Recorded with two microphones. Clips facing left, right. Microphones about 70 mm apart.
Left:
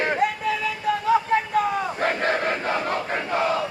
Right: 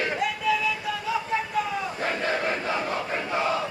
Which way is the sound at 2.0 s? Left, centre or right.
Left.